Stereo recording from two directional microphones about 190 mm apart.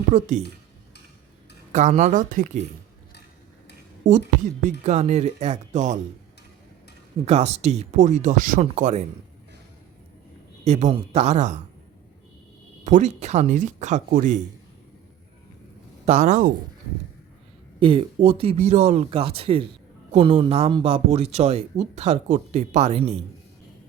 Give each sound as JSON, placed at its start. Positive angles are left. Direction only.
{"t": 0.1, "sound": "speech", "side_deg": -40}
{"t": 1.7, "sound": "speech", "side_deg": -40}
{"t": 4.0, "sound": "a woman's voice", "side_deg": -70}
{"t": 4.8, "sound": "speech", "side_deg": -35}
{"t": 7.3, "sound": "speech", "side_deg": -35}
{"t": 10.6, "sound": "speech", "side_deg": -35}
{"t": 12.8, "sound": "speech", "side_deg": -40}
{"t": 16.0, "sound": "speech", "side_deg": -40}
{"t": 17.7, "sound": "speech", "side_deg": -30}